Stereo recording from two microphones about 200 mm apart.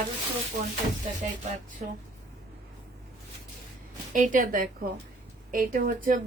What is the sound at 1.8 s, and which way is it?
Speech, 35° right (ahead or behind).